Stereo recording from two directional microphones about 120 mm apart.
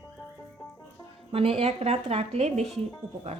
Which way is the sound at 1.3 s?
55° right (ahead or behind).